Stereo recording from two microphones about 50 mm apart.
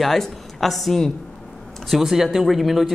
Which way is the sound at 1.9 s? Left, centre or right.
Centre.